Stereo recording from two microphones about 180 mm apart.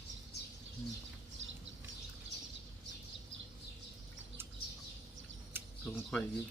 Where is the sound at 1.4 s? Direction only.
90° right.